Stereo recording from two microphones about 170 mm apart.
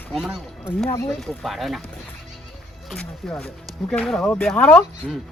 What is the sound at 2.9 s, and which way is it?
Speech, 10° left (ahead or behind).